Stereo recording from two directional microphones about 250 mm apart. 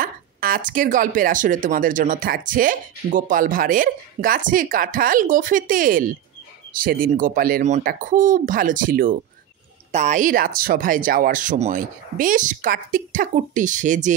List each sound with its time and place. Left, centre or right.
0.0 s speech: right